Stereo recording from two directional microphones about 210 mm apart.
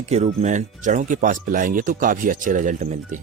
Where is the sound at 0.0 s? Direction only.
30° right (ahead or behind).